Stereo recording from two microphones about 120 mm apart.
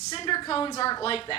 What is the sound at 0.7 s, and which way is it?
Speech, 30° left (ahead or behind).